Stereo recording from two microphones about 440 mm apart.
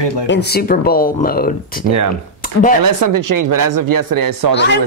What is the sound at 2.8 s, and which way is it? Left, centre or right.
Speech, right.